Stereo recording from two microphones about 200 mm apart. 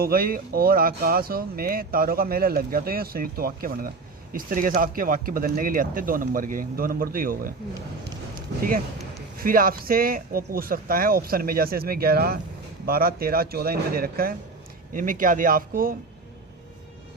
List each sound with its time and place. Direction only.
0.0 s speech: 45° right (ahead or behind)
9.4 s speech: 45° right (ahead or behind)